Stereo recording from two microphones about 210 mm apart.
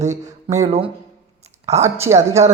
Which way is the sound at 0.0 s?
35° right (ahead or behind).